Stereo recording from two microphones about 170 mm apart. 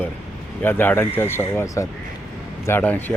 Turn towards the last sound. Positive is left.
turn(degrees=10)  # may be behind; listen again after turning